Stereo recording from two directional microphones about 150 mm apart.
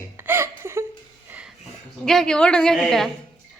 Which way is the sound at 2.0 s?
5° left (ahead or behind).